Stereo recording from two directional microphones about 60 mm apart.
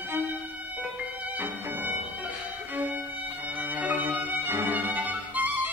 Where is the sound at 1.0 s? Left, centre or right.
Right.